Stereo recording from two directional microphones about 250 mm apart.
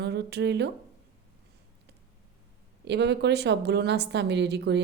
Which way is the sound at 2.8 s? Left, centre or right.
Right.